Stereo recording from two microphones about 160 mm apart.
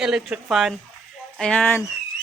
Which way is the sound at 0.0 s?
5° right (ahead or behind).